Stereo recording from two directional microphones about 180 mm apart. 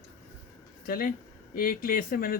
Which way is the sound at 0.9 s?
55° left (ahead or behind).